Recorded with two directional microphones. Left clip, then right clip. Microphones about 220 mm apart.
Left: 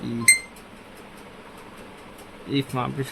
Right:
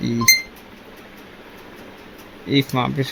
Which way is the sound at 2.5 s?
15° right (ahead or behind).